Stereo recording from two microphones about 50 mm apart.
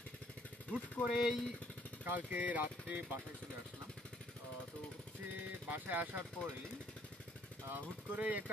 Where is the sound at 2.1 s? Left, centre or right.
Right.